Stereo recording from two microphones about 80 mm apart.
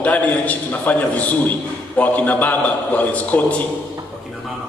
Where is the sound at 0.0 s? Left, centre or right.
Centre.